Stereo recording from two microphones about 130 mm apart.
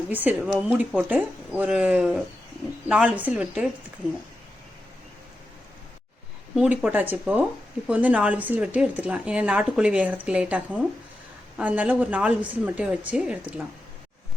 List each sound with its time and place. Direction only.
0.1 s a woman's voice: 15° right (ahead or behind)
6.6 s a woman's voice: 10° right (ahead or behind)